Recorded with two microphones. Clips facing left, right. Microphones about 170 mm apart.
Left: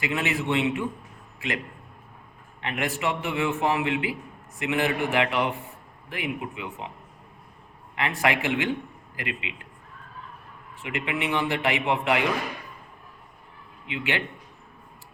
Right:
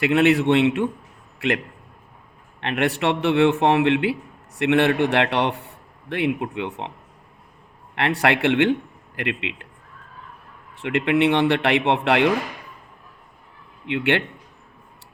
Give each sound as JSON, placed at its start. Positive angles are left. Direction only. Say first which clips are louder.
{"t": 0.0, "sound": "a man's voice", "louder": "right 11 dB", "side_deg": -65}
{"t": 7.9, "sound": "a man's voice", "louder": "right 5 dB", "side_deg": -70}
{"t": 10.8, "sound": "a man's voice", "louder": "right 10 dB", "side_deg": -70}
{"t": 13.8, "sound": "a man's voice", "louder": "right 8 dB", "side_deg": -65}